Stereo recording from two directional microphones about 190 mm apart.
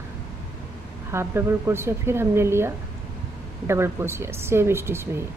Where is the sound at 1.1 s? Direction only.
15° right (ahead or behind).